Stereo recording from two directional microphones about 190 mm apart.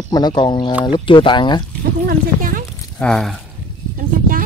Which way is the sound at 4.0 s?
50° right (ahead or behind).